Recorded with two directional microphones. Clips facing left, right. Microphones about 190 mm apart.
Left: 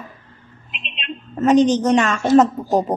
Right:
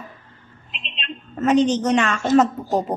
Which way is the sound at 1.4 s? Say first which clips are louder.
Left 3 dB; 40° left (ahead or behind).